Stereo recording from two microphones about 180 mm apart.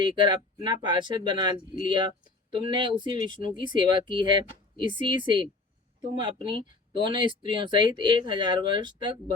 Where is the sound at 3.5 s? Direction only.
25° right (ahead or behind).